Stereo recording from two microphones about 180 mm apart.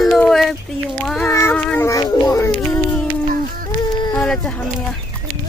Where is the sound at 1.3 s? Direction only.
15° left (ahead or behind).